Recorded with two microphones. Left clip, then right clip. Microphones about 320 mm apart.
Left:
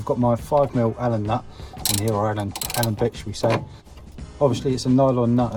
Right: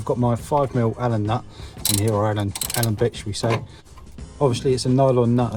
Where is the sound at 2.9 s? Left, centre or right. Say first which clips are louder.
Right 1 dB; right.